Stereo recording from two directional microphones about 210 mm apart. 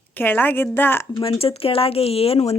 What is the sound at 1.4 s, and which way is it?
Speech, 25° left (ahead or behind).